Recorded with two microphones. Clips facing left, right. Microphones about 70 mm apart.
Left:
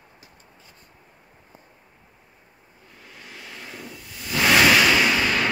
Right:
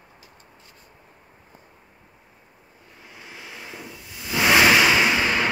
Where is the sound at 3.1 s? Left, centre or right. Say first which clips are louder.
Right 1 dB; centre.